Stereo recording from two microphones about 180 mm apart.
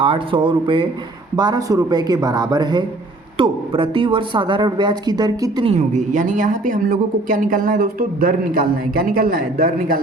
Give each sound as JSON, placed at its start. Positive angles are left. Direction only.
{"t": 0.0, "sound": "speech", "side_deg": -30}
{"t": 5.7, "sound": "a woman's voice", "side_deg": -40}